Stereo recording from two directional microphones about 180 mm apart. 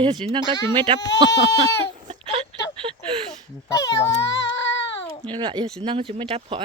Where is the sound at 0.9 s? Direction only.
75° left (ahead or behind).